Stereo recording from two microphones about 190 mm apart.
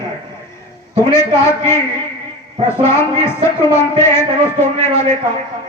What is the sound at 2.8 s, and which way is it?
A man's voice, 15° left (ahead or behind).